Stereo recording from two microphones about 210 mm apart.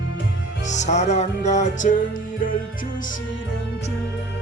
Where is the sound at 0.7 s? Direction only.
35° left (ahead or behind).